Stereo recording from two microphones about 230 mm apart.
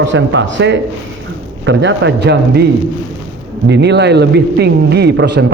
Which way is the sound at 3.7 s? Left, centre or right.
Right.